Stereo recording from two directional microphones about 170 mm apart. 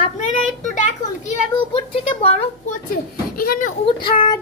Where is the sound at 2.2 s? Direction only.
40° left (ahead or behind).